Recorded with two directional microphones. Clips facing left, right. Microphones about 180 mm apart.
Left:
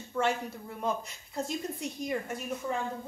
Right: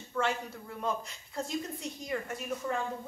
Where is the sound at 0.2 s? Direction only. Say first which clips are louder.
Left 2 dB; 20° left (ahead or behind).